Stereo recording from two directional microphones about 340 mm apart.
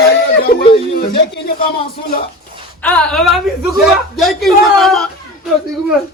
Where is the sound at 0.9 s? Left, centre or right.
Left.